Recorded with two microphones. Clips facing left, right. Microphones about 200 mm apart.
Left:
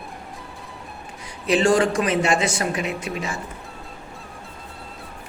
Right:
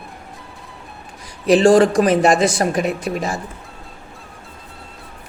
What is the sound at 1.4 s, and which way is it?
A woman's voice, 35° right (ahead or behind).